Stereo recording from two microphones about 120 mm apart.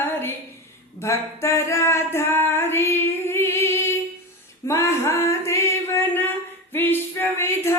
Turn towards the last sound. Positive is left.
turn(degrees=20)  # may be behind; listen again after turning